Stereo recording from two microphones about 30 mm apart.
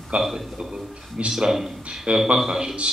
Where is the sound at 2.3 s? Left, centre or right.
Centre.